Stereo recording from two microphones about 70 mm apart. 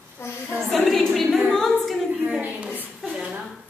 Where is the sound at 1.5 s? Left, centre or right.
Centre.